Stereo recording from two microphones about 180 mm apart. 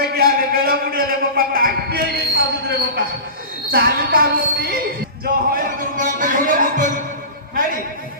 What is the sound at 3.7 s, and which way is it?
A woman's voice, 60° right (ahead or behind).